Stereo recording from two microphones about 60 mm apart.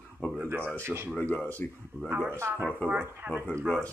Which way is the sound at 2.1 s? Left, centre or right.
Right.